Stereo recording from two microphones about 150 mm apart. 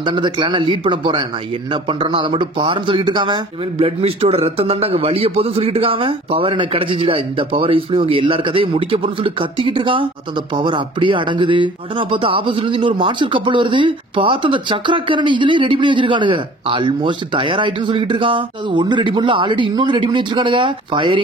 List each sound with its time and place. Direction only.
0.0 s speech: 35° right (ahead or behind)